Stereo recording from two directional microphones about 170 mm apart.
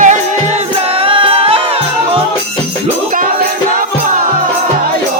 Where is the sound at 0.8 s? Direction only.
35° right (ahead or behind).